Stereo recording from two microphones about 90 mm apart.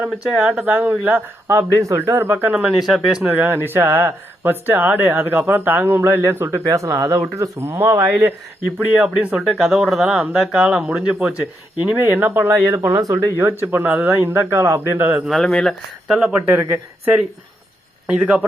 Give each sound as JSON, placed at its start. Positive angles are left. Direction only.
{"t": 0.4, "sound": "speech", "side_deg": -15}
{"t": 2.5, "sound": "speech", "side_deg": -10}
{"t": 3.2, "sound": "speech", "side_deg": -20}
{"t": 8.0, "sound": "speech", "side_deg": -15}
{"t": 13.0, "sound": "speech", "side_deg": -35}
{"t": 13.4, "sound": "speech", "side_deg": -20}
{"t": 15.4, "sound": "speech", "side_deg": 5}
{"t": 16.0, "sound": "speech", "side_deg": -5}
{"t": 16.3, "sound": "speech", "side_deg": -20}